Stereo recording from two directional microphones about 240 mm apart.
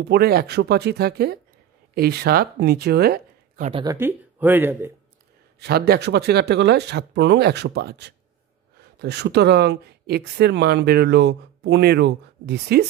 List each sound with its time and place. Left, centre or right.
0.0 s speech: right
3.7 s speech: centre
5.6 s speech: right